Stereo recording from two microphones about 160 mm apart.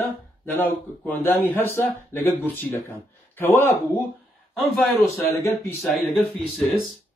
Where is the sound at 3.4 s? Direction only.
15° left (ahead or behind).